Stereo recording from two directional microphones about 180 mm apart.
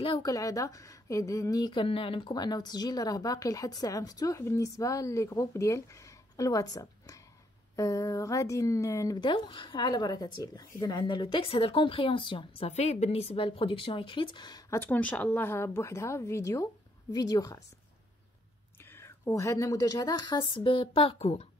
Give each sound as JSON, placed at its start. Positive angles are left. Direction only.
{"t": 0.0, "sound": "a woman's voice", "side_deg": 25}
{"t": 14.8, "sound": "a woman's voice", "side_deg": 10}
{"t": 18.9, "sound": "a woman's voice", "side_deg": 15}